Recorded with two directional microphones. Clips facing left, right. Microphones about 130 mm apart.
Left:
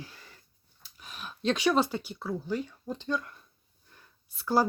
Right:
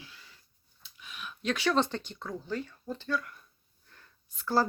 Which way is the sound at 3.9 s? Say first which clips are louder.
Left 1 dB; 15° left (ahead or behind).